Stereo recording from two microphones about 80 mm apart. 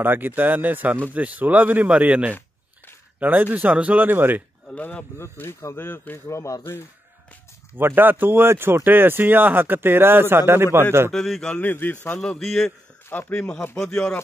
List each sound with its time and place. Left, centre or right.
0.0 s speech: right
4.6 s a man's voice: centre
5.4 s speech: left
7.7 s speech: right
11.1 s a man's voice: centre
11.6 s a man's voice: left
12.2 s a man's voice: centre
13.7 s a man's voice: left